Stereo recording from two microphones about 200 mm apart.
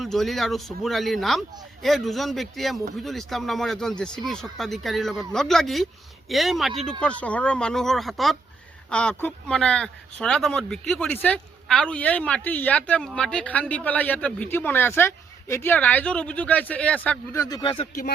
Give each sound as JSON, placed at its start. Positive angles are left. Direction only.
{"t": 0.0, "sound": "speech", "side_deg": 0}
{"t": 17.6, "sound": "speech", "side_deg": 25}